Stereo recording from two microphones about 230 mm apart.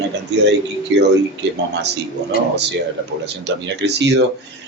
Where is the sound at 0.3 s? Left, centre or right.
Right.